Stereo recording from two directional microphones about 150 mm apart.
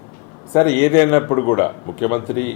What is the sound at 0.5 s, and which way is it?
A man's voice, 20° left (ahead or behind).